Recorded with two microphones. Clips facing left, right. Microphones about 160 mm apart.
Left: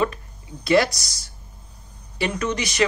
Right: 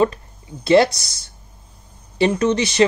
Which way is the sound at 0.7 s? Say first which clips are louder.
Right 5 dB; 25° right (ahead or behind).